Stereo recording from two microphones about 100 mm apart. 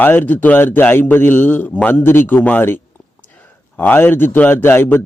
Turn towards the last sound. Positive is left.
turn(degrees=20)  # may be behind; listen again after turning